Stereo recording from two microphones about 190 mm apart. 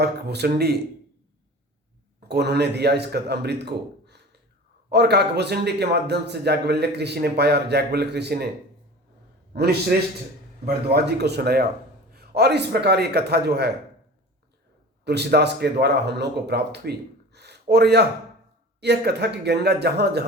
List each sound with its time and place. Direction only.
0.0 s a man's voice: 60° right (ahead or behind)
2.2 s a man's voice: 60° right (ahead or behind)
9.5 s a man's voice: 55° right (ahead or behind)
10.8 s a man's voice: 60° right (ahead or behind)
15.0 s a man's voice: 60° right (ahead or behind)
17.3 s a sound: 60° right (ahead or behind)
18.8 s a man's voice: 60° right (ahead or behind)